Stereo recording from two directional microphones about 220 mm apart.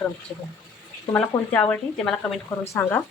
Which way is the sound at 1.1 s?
5° left (ahead or behind).